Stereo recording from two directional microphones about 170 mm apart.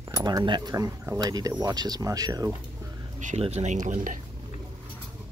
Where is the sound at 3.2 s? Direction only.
40° right (ahead or behind).